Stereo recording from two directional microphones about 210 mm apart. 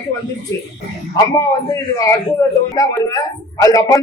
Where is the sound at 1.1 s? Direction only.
15° left (ahead or behind).